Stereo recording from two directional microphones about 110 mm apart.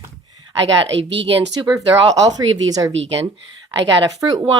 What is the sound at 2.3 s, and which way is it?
Speech, 35° right (ahead or behind).